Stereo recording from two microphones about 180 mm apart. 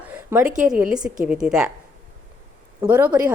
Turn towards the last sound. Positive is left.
turn(degrees=-15)  # may be behind; listen again after turning